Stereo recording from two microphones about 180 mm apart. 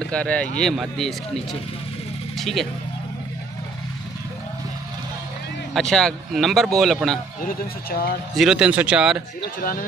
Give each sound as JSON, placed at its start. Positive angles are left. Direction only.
{"t": 0.1, "sound": "speech", "side_deg": 5}
{"t": 5.8, "sound": "speech", "side_deg": 5}
{"t": 7.4, "sound": "speech", "side_deg": 55}
{"t": 8.4, "sound": "speech", "side_deg": -5}
{"t": 9.4, "sound": "a man's voice", "side_deg": 55}